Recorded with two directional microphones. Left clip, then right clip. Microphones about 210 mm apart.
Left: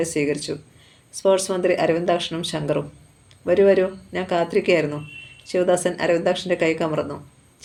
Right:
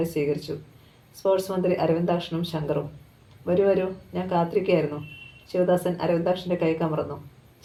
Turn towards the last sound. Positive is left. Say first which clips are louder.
# left 4 dB
turn(degrees=35)  # may be behind; listen again after turning